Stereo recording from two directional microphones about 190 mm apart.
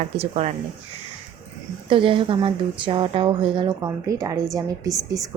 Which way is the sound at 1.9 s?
25° right (ahead or behind).